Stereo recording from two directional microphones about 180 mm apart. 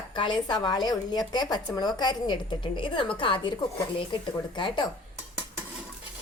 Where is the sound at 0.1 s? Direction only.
25° left (ahead or behind).